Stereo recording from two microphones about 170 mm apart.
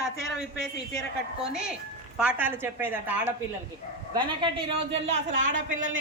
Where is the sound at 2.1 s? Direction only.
10° right (ahead or behind).